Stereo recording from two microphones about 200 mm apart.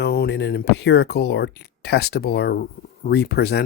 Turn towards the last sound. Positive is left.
turn(degrees=55)  # may be behind; listen again after turning